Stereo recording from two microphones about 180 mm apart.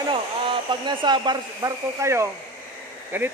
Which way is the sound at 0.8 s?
25° right (ahead or behind).